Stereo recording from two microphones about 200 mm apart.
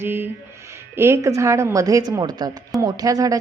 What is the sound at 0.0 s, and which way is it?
Speech, 10° right (ahead or behind).